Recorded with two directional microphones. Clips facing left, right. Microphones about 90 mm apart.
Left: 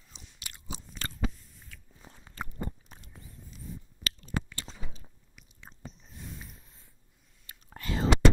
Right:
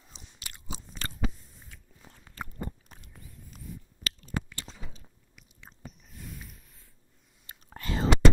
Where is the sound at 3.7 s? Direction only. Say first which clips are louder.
Even; 30° left (ahead or behind).